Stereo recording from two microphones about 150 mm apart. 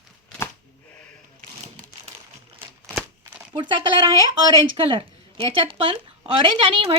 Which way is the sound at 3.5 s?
30° right (ahead or behind).